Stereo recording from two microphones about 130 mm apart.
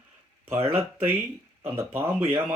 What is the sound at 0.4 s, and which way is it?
Speech, 20° right (ahead or behind).